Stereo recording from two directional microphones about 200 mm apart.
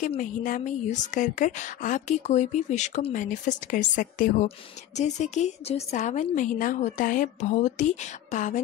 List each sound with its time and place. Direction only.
0.0 s a woman's voice: 40° left (ahead or behind)